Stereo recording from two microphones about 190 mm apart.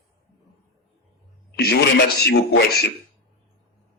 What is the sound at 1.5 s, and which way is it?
Speech, 60° left (ahead or behind).